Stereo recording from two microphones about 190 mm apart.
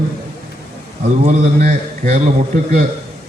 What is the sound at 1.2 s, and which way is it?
Speech, 35° right (ahead or behind).